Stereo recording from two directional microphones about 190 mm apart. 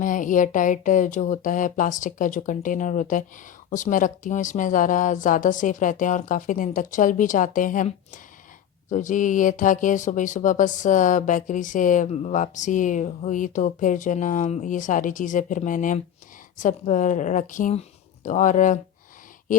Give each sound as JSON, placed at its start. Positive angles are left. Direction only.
{"t": 0.0, "sound": "a woman's voice", "side_deg": 45}